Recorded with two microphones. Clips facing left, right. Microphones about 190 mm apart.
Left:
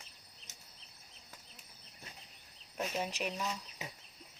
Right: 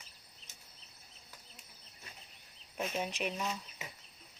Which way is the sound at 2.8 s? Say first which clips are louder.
Even; 5° right (ahead or behind).